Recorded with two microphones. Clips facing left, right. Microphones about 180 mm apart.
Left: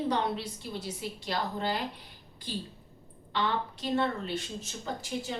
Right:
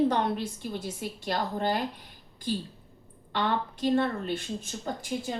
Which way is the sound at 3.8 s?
50° right (ahead or behind).